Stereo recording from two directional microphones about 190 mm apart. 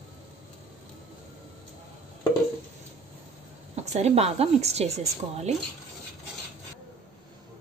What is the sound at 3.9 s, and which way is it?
A woman's voice, 35° right (ahead or behind).